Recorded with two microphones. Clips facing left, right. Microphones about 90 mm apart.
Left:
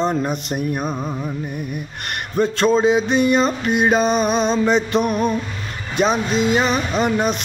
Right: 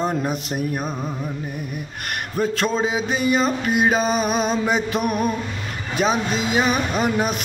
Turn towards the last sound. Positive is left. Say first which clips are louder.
# left 2 dB
turn(degrees=-5)  # may be behind; listen again after turning